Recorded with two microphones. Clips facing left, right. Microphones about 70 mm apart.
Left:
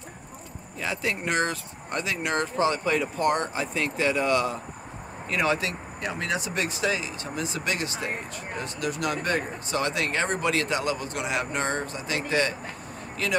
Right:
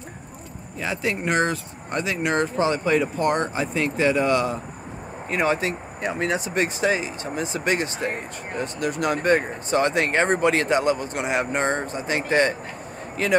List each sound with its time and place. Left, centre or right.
0.7 s speech: right